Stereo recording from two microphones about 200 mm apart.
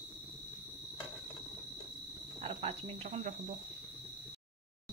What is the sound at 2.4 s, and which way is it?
Speech, 30° right (ahead or behind).